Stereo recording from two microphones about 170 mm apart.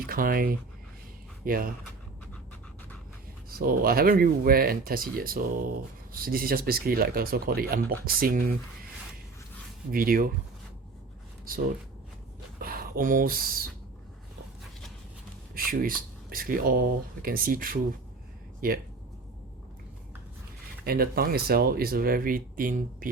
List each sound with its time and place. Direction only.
0.0 s speech: 60° right (ahead or behind)
3.6 s speech: 60° right (ahead or behind)
9.9 s speech: 60° right (ahead or behind)
11.5 s speech: 55° right (ahead or behind)
12.5 s a sound: 60° right (ahead or behind)
15.5 s speech: 60° right (ahead or behind)
20.8 s speech: 60° right (ahead or behind)